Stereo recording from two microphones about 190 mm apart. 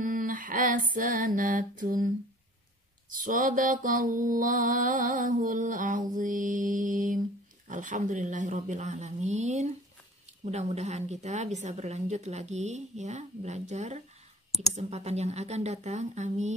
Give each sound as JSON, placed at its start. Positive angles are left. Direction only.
{"t": 0.0, "sound": "female singing", "side_deg": -45}
{"t": 3.2, "sound": "mantra", "side_deg": -45}
{"t": 10.4, "sound": "a woman's voice", "side_deg": -35}